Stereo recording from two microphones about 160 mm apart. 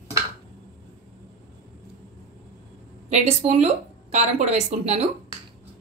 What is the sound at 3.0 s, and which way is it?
Speech, 45° right (ahead or behind).